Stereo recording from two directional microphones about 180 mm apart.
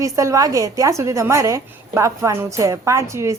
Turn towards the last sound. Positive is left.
turn(degrees=-15)  # may be behind; listen again after turning